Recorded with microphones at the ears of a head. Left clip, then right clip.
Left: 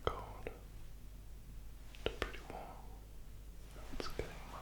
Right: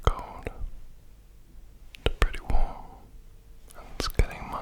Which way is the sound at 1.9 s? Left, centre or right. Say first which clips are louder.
Right 11 dB; right.